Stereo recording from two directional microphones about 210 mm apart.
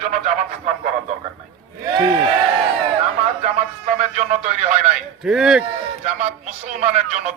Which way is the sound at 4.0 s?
35° right (ahead or behind).